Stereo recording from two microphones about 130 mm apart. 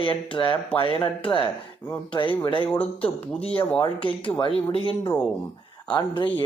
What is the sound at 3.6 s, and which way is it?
Speech, 40° left (ahead or behind).